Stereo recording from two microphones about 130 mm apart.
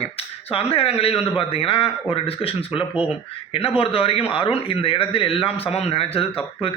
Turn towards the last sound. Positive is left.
turn(degrees=45)  # may be behind; listen again after turning